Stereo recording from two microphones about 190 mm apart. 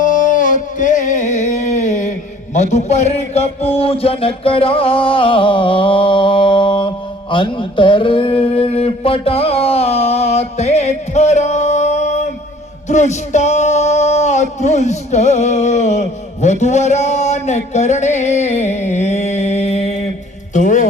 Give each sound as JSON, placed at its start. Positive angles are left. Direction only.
{"t": 0.0, "sound": "a sound", "side_deg": 45}
{"t": 2.5, "sound": "speech", "side_deg": 35}
{"t": 12.9, "sound": "music", "side_deg": 40}